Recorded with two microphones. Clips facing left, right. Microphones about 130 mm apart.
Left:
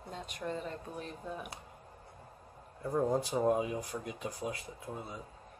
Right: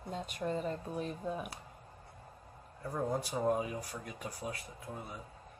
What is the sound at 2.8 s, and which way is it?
Speech, 20° left (ahead or behind).